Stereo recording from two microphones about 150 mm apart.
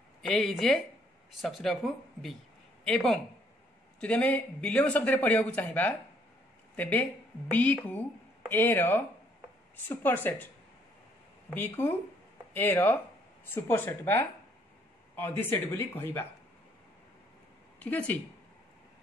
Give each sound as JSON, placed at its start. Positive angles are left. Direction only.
{"t": 0.3, "sound": "speech", "side_deg": 0}
{"t": 2.8, "sound": "a man's voice", "side_deg": 5}
{"t": 11.5, "sound": "a man's voice", "side_deg": 15}
{"t": 17.7, "sound": "speech", "side_deg": 10}